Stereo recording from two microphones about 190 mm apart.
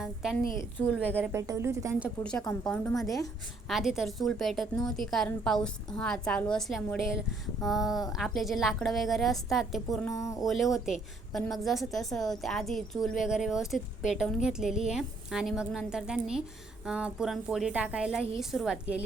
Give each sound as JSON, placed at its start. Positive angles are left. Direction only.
{"t": 0.0, "sound": "a woman's voice", "side_deg": 0}
{"t": 2.2, "sound": "a woman's voice", "side_deg": 5}
{"t": 10.1, "sound": "speech", "side_deg": 15}
{"t": 10.4, "sound": "a woman's voice", "side_deg": 0}